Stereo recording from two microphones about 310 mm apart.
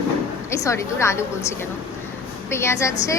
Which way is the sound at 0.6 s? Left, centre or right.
Centre.